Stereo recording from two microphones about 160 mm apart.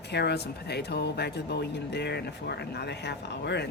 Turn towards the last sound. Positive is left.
turn(degrees=90)